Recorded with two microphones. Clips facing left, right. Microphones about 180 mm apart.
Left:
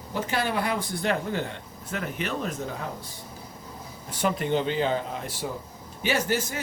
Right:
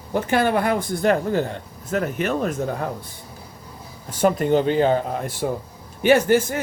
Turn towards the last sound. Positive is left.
turn(degrees=-55)  # may be behind; listen again after turning